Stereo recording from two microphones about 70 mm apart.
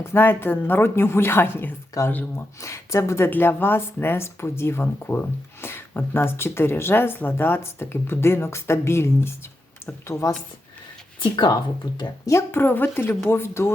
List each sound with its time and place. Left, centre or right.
0.0 s speech: left
2.6 s speech: left
3.2 s speech: left
12.2 s speech: left